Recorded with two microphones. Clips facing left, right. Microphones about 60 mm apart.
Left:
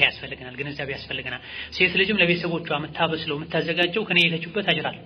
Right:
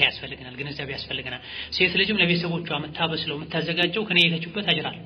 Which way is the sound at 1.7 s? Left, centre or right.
Centre.